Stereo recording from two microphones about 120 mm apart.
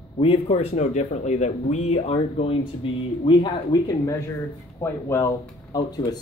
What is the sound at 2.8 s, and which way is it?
Speech, 45° left (ahead or behind).